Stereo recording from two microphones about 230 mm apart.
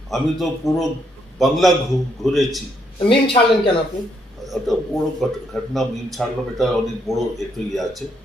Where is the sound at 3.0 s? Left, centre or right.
Left.